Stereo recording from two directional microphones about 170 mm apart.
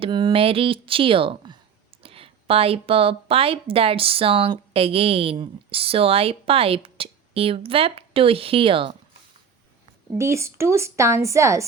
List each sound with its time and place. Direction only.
0.0 s a woman's voice: 25° right (ahead or behind)
10.1 s a woman's voice: 15° right (ahead or behind)